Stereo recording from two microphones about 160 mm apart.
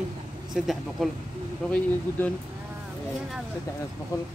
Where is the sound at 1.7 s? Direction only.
10° left (ahead or behind).